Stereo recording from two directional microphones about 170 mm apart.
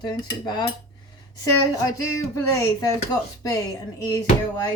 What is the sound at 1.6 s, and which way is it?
Speech, 20° left (ahead or behind).